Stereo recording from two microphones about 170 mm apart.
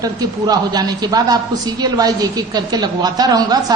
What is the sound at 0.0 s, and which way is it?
A woman's voice, 20° right (ahead or behind).